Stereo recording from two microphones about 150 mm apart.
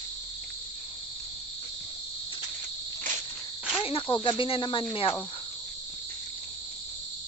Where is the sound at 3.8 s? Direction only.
35° left (ahead or behind).